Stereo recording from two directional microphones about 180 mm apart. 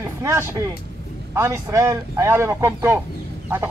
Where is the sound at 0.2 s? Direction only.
15° right (ahead or behind).